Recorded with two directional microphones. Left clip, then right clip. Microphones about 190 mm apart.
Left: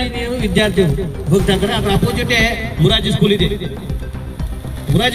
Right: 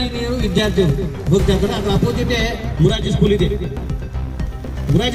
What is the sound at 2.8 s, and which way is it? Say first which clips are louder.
Speech: left 3 dB; 25° right (ahead or behind).